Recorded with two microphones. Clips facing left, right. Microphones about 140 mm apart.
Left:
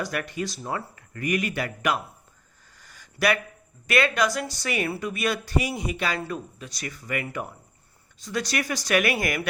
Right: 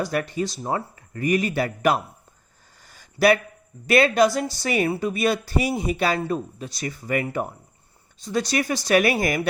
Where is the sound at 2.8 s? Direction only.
30° right (ahead or behind).